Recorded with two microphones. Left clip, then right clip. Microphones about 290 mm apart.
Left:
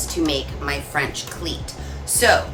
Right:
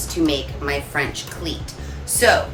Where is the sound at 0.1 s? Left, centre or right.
Centre.